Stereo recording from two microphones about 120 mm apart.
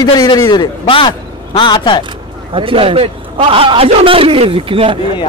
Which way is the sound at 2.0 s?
45° right (ahead or behind).